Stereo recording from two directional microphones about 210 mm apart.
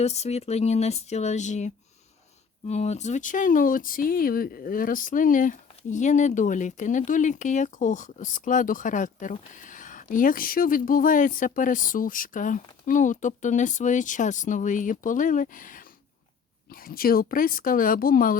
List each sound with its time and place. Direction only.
0.0 s speech: 30° left (ahead or behind)